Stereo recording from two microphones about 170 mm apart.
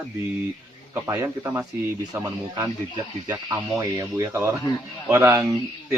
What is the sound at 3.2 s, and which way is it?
Speech, 20° right (ahead or behind).